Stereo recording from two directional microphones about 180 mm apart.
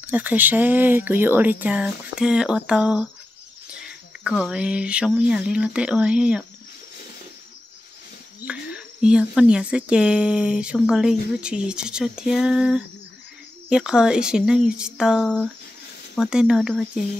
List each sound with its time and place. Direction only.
0.0 s speech: 10° right (ahead or behind)
4.2 s speech: 5° right (ahead or behind)
8.5 s speech: 5° right (ahead or behind)